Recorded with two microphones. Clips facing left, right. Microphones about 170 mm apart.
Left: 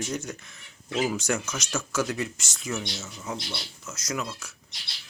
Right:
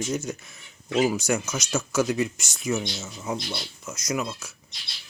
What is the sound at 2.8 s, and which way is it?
Speech, 25° right (ahead or behind).